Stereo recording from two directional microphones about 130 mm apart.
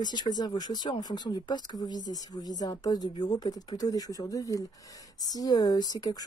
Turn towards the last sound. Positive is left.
turn(degrees=30)  # may be behind; listen again after turning